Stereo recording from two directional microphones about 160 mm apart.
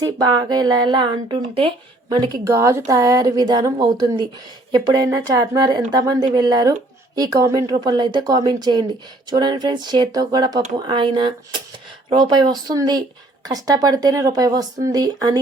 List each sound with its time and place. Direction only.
0.0 s speech: 25° right (ahead or behind)